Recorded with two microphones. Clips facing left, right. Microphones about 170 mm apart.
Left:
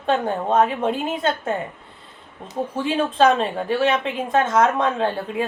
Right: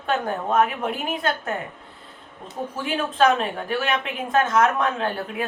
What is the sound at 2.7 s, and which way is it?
A man's voice, 25° left (ahead or behind).